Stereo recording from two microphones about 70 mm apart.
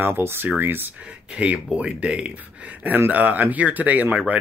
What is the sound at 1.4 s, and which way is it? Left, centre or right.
Speech, centre.